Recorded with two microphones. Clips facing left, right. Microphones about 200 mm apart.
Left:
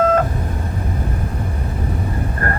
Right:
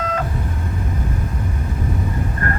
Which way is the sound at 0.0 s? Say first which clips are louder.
Left 8 dB; 50° left (ahead or behind).